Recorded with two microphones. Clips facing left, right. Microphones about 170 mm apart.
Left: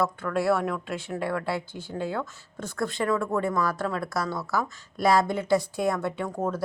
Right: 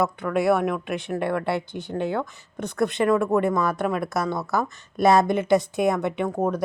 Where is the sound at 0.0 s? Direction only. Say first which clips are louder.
Right 3 dB; 20° right (ahead or behind).